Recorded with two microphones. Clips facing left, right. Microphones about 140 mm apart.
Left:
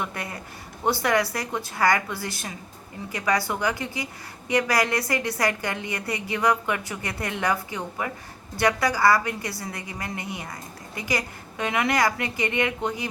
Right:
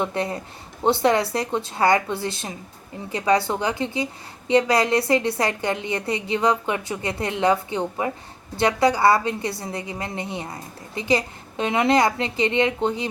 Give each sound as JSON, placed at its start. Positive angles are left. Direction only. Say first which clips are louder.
{"t": 0.0, "sound": "a woman's voice", "louder": "right 7 dB", "side_deg": -25}